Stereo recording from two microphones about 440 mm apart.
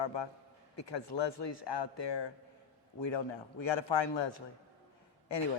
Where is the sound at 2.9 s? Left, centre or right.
Left.